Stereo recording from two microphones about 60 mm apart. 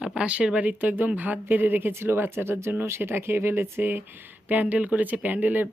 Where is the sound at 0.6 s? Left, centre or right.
Right.